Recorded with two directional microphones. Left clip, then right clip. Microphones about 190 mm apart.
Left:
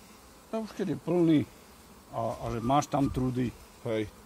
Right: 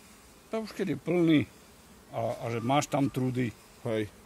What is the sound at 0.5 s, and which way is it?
Speech, 30° right (ahead or behind).